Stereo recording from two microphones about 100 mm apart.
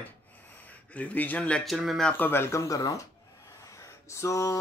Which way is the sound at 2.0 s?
20° left (ahead or behind).